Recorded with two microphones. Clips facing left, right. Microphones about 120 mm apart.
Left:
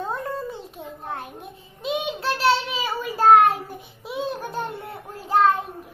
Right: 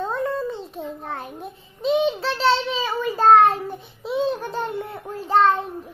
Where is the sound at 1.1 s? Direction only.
Centre (ahead or behind).